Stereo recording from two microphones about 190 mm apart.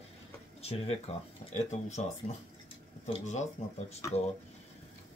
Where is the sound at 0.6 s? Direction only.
30° left (ahead or behind).